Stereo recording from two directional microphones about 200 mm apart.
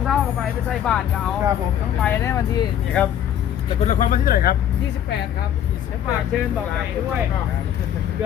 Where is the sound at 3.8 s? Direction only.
35° left (ahead or behind).